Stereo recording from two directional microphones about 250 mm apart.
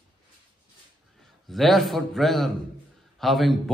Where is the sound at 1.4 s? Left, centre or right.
Centre.